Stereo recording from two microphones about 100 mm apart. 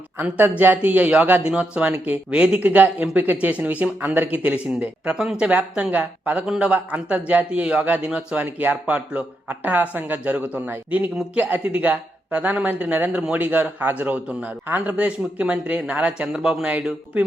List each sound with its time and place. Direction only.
0.2 s speech: 15° right (ahead or behind)